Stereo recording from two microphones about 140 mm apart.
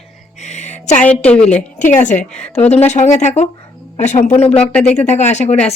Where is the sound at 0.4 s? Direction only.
55° left (ahead or behind).